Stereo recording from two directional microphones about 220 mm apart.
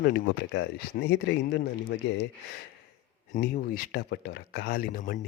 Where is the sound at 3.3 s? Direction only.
40° left (ahead or behind).